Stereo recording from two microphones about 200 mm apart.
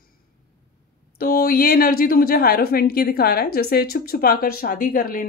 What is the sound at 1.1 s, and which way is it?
A woman's voice, 50° left (ahead or behind).